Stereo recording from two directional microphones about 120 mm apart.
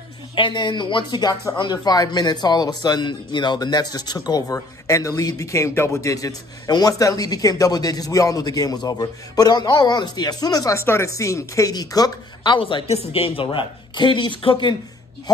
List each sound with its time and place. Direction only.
0.4 s speech: 40° left (ahead or behind)
12.5 s a woman's voice: 50° left (ahead or behind)